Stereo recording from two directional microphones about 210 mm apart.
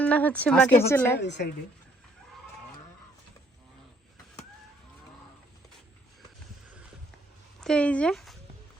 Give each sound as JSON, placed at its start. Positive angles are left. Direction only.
{"t": 0.0, "sound": "speech", "side_deg": 5}
{"t": 1.2, "sound": "a woman's voice", "side_deg": 55}
{"t": 7.6, "sound": "speech", "side_deg": 5}